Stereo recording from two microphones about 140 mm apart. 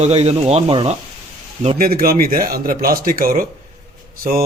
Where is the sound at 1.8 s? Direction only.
90° right.